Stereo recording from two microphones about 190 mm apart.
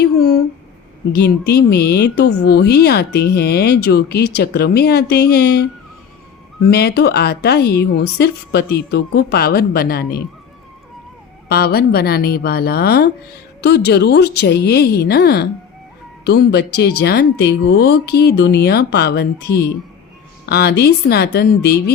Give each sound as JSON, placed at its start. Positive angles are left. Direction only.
{"t": 0.0, "sound": "a sound", "side_deg": 55}
{"t": 1.1, "sound": "speech", "side_deg": 55}
{"t": 6.7, "sound": "speech", "side_deg": 60}
{"t": 11.4, "sound": "speech", "side_deg": 55}